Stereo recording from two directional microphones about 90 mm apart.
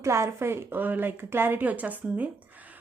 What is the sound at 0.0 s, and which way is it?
Speech, 30° right (ahead or behind).